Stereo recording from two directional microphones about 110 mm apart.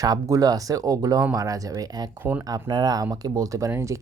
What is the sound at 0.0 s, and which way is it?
Speech, 30° right (ahead or behind).